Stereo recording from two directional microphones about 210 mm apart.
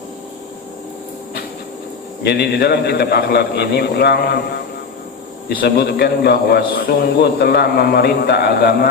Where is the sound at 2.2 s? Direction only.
50° left (ahead or behind).